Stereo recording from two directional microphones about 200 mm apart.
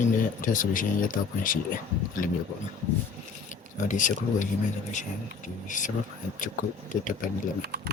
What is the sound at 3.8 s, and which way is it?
Speech, 40° left (ahead or behind).